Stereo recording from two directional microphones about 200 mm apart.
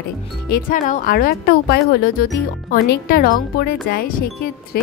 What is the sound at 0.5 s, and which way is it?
A woman's voice, 45° left (ahead or behind).